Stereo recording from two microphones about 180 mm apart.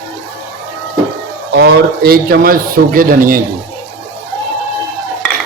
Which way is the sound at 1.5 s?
65° right (ahead or behind).